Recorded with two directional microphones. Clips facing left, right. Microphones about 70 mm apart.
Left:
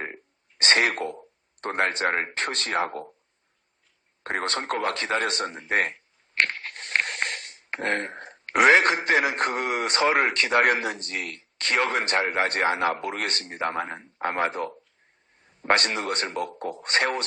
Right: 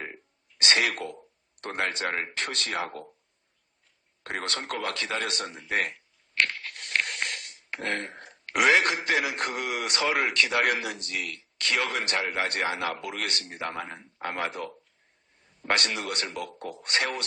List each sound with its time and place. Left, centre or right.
0.6 s speech: left
4.2 s speech: left